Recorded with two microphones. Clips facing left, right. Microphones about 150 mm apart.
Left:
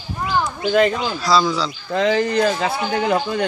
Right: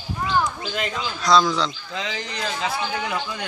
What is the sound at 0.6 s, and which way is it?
Speech, 60° left (ahead or behind).